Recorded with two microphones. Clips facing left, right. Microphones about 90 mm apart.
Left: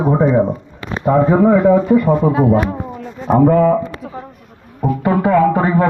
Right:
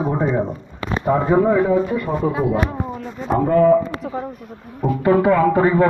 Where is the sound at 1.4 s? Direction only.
60° left (ahead or behind).